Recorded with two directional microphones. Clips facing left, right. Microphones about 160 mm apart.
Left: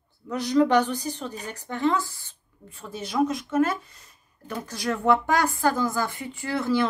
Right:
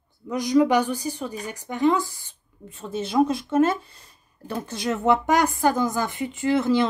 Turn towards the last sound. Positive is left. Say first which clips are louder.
# right 4 dB
turn(degrees=-20)  # may be behind; listen again after turning